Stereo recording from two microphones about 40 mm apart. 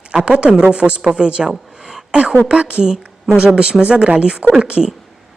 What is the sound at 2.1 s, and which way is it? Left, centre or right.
A woman's voice, right.